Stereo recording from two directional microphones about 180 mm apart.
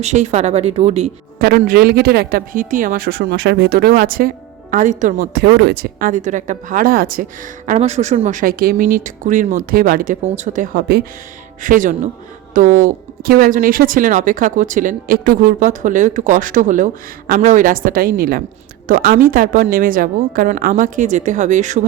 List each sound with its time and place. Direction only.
0.0 s speech: 40° right (ahead or behind)
1.4 s speech: 55° right (ahead or behind)
4.7 s speech: 45° right (ahead or behind)
5.2 s speech: 55° right (ahead or behind)
7.7 s speech: 40° right (ahead or behind); by 11.0 s 60° right (ahead or behind)
11.6 s speech: 50° right (ahead or behind)